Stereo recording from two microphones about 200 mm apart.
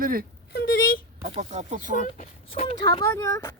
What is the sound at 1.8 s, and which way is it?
Speech, 40° left (ahead or behind).